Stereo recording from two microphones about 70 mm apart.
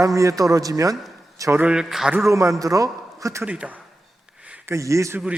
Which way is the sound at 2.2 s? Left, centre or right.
Right.